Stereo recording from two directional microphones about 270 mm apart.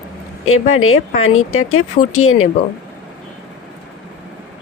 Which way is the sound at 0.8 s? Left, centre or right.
Left.